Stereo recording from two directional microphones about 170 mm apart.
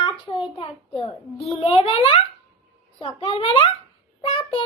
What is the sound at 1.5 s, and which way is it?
A child's voice, 35° left (ahead or behind).